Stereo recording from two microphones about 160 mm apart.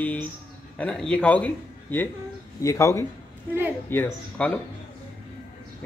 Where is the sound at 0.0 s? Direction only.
10° left (ahead or behind).